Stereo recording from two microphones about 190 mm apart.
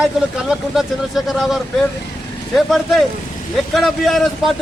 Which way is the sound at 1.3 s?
Centre (ahead or behind).